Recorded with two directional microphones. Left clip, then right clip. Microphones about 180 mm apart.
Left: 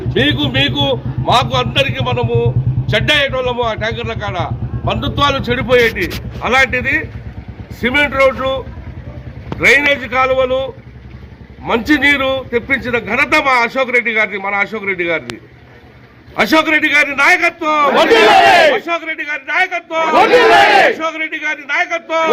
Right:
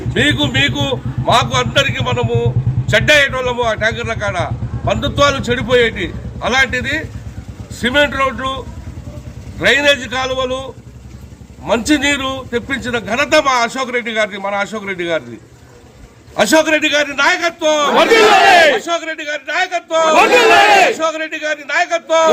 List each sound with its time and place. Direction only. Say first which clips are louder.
0.1 s a man's voice: even; 15° right (ahead or behind)
9.6 s a man's voice: left 1 dB; 20° right (ahead or behind)
16.4 s a man's voice: even; 20° right (ahead or behind)